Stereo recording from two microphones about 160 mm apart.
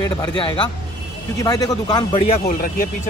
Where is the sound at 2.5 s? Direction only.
60° left (ahead or behind).